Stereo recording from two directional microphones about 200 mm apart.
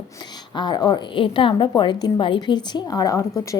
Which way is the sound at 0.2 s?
20° left (ahead or behind).